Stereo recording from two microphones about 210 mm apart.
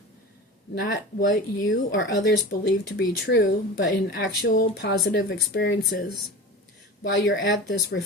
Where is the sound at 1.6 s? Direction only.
65° left (ahead or behind).